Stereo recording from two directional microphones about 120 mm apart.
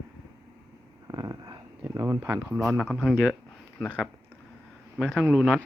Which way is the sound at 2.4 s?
10° right (ahead or behind).